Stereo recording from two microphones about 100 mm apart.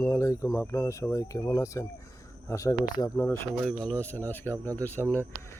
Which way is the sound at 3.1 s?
25° left (ahead or behind).